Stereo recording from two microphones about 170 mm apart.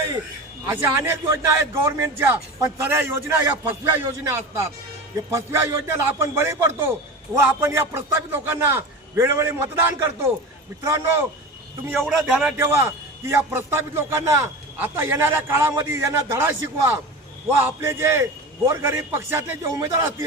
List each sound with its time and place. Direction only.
0.6 s a man's voice: 15° right (ahead or behind)
11.9 s a man's voice: centre (ahead or behind)
12.5 s a man's voice: 15° right (ahead or behind)